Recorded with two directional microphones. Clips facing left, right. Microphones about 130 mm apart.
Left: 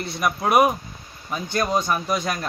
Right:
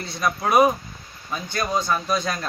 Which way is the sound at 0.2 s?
15° left (ahead or behind).